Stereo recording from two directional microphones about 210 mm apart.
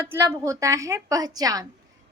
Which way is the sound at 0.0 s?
10° right (ahead or behind).